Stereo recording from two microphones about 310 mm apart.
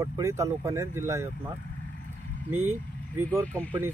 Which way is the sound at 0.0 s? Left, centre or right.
Centre.